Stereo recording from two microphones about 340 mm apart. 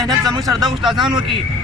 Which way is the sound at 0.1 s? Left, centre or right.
Centre.